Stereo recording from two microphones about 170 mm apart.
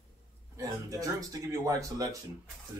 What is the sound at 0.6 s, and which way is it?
Speech, 20° right (ahead or behind).